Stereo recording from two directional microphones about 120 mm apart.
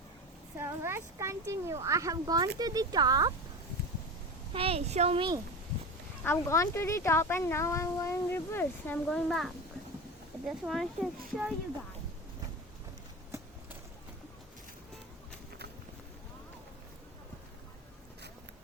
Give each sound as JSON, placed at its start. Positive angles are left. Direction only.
{"t": 0.6, "sound": "speech", "side_deg": -20}
{"t": 4.5, "sound": "a woman's voice", "side_deg": -50}
{"t": 6.2, "sound": "speech", "side_deg": 20}
{"t": 9.0, "sound": "speech", "side_deg": 5}